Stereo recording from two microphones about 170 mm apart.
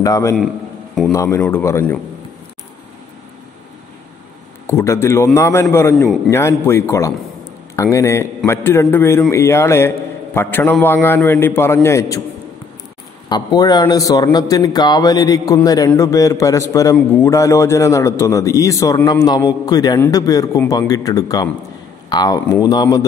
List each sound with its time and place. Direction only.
0.0 s a man's voice: 20° left (ahead or behind)
4.6 s a man's voice: 15° left (ahead or behind)
13.3 s a man's voice: 25° left (ahead or behind)